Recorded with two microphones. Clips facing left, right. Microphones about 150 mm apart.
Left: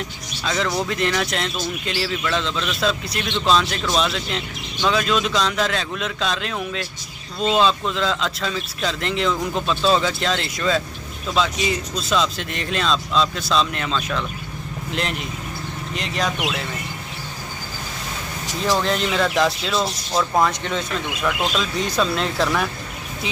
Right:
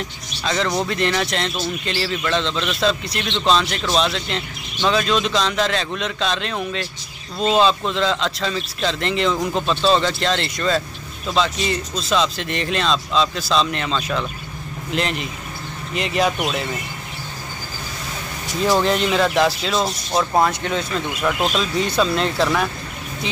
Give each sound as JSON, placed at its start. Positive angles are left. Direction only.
{"t": 0.7, "sound": "speech", "side_deg": 5}
{"t": 18.7, "sound": "speech", "side_deg": -5}
{"t": 19.7, "sound": "speech", "side_deg": -20}
{"t": 21.5, "sound": "speech", "side_deg": 0}